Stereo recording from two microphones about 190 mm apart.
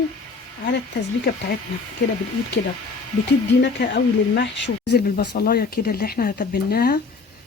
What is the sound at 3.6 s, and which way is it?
Speech, 60° left (ahead or behind).